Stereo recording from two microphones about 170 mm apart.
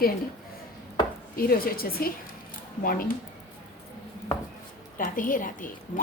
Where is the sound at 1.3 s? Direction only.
60° left (ahead or behind).